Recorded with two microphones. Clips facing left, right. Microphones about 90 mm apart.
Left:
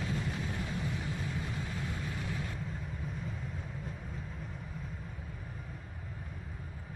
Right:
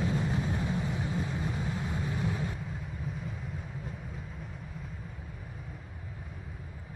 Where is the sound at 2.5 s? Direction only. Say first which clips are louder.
Right 1 dB; 5° right (ahead or behind).